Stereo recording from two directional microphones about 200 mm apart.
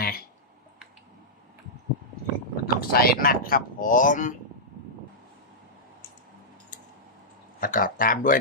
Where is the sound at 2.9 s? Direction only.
50° left (ahead or behind).